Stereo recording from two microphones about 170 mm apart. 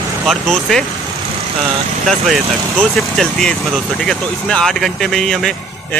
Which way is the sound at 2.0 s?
Centre (ahead or behind).